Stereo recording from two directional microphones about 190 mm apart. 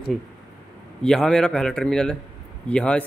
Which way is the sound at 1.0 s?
5° left (ahead or behind).